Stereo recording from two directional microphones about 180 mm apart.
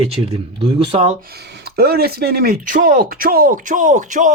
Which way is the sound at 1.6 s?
60° right (ahead or behind).